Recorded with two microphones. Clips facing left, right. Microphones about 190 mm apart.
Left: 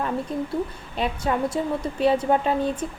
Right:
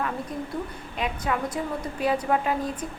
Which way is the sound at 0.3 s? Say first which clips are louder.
Left 5 dB; 30° left (ahead or behind).